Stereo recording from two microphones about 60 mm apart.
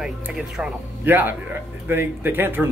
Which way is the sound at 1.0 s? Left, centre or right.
Right.